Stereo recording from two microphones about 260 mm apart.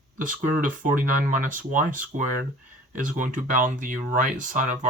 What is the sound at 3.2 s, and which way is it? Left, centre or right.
Speech, right.